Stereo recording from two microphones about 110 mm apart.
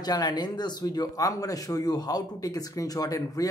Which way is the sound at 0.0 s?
40° left (ahead or behind).